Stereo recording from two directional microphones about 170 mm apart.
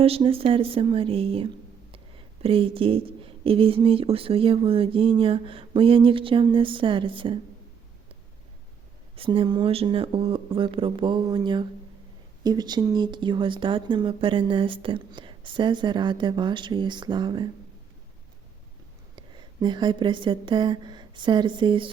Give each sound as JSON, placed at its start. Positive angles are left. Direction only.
{"t": 0.0, "sound": "speech", "side_deg": -35}
{"t": 9.1, "sound": "speech", "side_deg": -30}
{"t": 19.1, "sound": "a woman's voice", "side_deg": -25}